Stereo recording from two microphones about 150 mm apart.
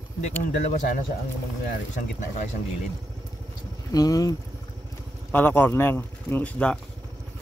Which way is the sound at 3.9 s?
25° left (ahead or behind).